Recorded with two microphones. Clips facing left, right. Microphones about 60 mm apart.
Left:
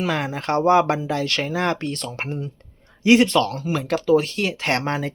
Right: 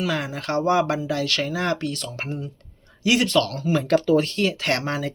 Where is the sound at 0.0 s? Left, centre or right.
Left.